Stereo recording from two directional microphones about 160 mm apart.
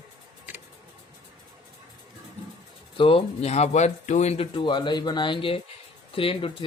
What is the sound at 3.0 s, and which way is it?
Speech, 35° left (ahead or behind).